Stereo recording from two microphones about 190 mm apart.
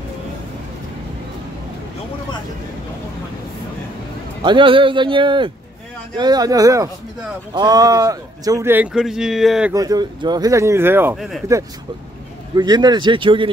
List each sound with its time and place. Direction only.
4.4 s speech: 25° right (ahead or behind); by 9.7 s centre (ahead or behind)
9.7 s speech: 20° right (ahead or behind)
11.1 s speech: centre (ahead or behind)
12.5 s speech: 20° right (ahead or behind)